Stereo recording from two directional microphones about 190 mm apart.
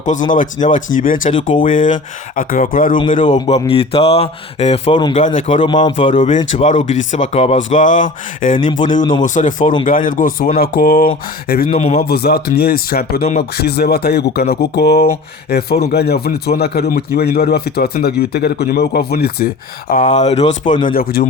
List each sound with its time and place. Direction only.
0.3 s speech: 40° left (ahead or behind)
3.2 s speech: 25° left (ahead or behind)
5.1 s speech: 40° left (ahead or behind)
5.5 s speech: 25° left (ahead or behind)
6.1 s a man's voice: 40° left (ahead or behind)
19.9 s speech: 40° left (ahead or behind)
20.8 s speech: 50° left (ahead or behind)